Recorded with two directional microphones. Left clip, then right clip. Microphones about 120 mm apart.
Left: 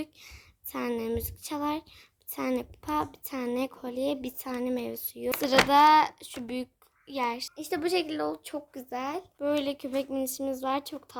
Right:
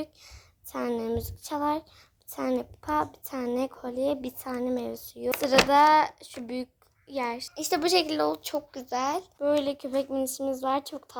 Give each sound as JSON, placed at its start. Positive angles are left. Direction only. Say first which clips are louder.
{"t": 0.0, "sound": "a woman's voice", "louder": "right 2 dB", "side_deg": 20}
{"t": 7.5, "sound": "speech", "louder": "right 4 dB", "side_deg": 5}